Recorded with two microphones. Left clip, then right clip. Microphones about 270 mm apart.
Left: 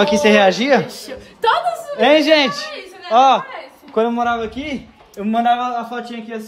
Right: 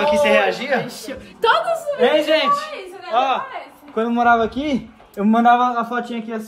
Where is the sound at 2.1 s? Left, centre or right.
Left.